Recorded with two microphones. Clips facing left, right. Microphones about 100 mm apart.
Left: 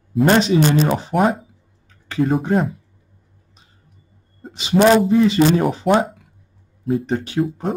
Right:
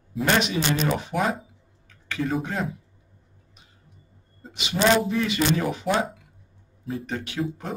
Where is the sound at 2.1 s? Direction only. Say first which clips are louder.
Left 8 dB; 45° left (ahead or behind).